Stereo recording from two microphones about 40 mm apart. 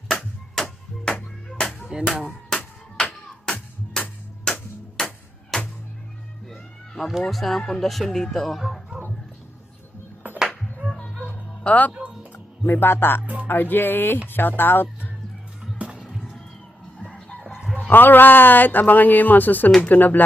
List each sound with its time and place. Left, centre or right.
0.5 s music: centre
1.9 s a sound: right
4.0 s music: centre
7.2 s speech: centre
8.9 s a sound: right
10.3 s music: right
11.6 s speech: left
12.6 s speech: left
13.2 s speech: right
13.5 s speech: left
15.8 s music: right
17.1 s chicken: left
17.7 s a man's voice: left